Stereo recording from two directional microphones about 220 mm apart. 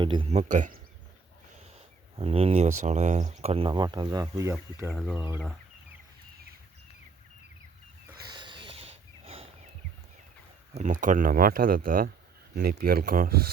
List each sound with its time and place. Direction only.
0.0 s speech: 25° right (ahead or behind)
2.1 s speech: 25° right (ahead or behind); by 5.4 s 10° right (ahead or behind)
8.2 s a sound: 20° right (ahead or behind)
10.8 s speech: 35° right (ahead or behind)